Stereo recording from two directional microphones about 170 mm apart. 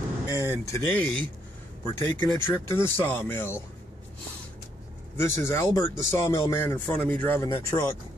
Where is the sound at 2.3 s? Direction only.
15° left (ahead or behind).